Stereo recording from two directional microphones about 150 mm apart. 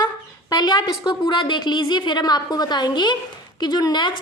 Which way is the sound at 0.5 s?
30° left (ahead or behind).